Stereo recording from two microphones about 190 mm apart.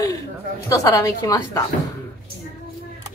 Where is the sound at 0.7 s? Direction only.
15° left (ahead or behind).